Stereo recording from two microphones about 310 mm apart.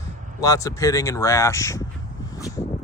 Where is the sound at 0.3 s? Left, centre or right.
Centre.